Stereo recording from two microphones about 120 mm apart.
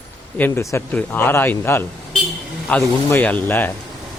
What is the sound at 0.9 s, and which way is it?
Speech, 15° left (ahead or behind).